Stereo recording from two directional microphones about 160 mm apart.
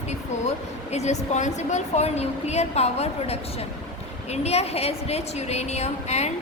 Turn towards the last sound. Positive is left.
turn(degrees=45)  # may be behind; listen again after turning